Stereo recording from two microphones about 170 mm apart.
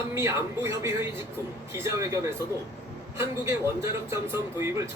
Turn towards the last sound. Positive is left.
turn(degrees=-15)  # may be behind; listen again after turning